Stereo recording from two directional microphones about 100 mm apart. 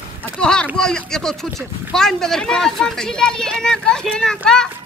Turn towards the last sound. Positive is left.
turn(degrees=5)  # may be behind; listen again after turning